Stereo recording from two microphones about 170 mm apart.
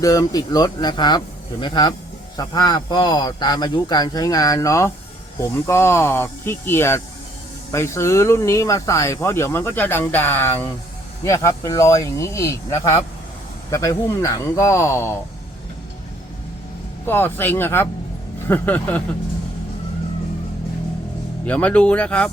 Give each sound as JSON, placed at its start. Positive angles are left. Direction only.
{"t": 0.0, "sound": "speech", "side_deg": 20}
{"t": 17.1, "sound": "speech", "side_deg": 10}
{"t": 21.4, "sound": "speech", "side_deg": 10}